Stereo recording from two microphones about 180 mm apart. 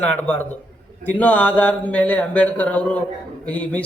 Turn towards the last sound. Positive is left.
turn(degrees=5)  # may be behind; listen again after turning